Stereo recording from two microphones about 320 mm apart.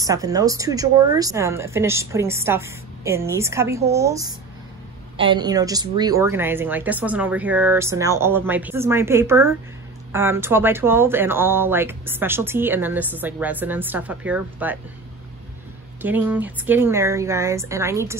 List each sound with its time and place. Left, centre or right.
0.0 s speech: centre
16.0 s speech: centre